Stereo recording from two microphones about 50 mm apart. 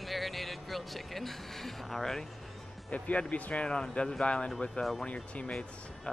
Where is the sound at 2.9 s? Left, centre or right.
Left.